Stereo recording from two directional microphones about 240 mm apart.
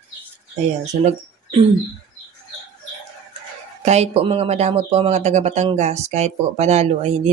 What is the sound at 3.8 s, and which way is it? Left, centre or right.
Speech, right.